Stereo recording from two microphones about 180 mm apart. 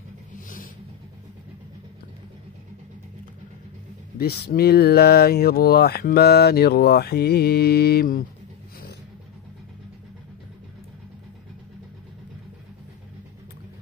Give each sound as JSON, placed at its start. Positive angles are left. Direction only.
{"t": 4.2, "sound": "speech", "side_deg": 60}